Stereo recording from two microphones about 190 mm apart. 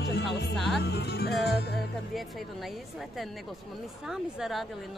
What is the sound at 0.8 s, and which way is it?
Speech, 60° left (ahead or behind).